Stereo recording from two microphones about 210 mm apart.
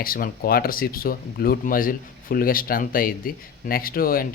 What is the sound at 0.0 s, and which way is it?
Speech, 45° left (ahead or behind).